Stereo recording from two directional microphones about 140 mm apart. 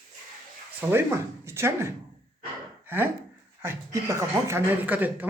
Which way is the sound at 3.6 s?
20° right (ahead or behind).